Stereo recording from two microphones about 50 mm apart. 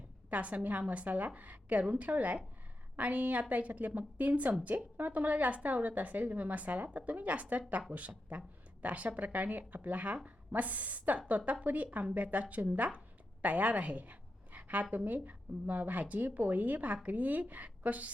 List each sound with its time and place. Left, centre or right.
0.3 s a woman's voice: right